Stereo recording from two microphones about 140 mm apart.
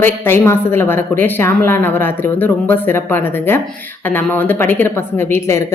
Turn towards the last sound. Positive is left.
turn(degrees=20)  # may be behind; listen again after turning